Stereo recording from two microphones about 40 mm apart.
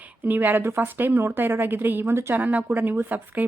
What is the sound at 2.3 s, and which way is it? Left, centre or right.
Speech, right.